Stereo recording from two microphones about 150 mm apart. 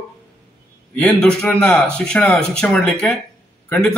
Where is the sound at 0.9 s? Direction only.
10° left (ahead or behind).